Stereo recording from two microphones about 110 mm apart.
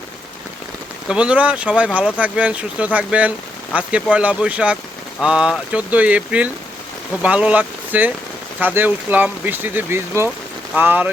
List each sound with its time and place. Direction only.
1.0 s speech: 10° right (ahead or behind)